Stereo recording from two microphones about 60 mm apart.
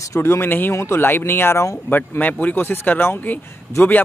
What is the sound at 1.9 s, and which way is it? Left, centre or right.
Speech, left.